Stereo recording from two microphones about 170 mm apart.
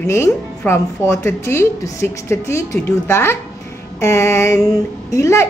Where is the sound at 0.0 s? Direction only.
15° left (ahead or behind).